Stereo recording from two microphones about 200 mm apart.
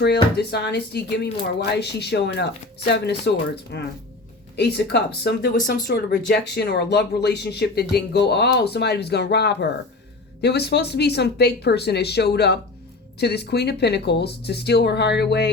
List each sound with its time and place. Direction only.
0.0 s speech: 55° left (ahead or behind)